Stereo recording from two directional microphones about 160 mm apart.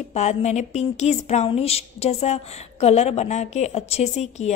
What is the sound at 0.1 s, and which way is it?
A woman's voice, 45° left (ahead or behind).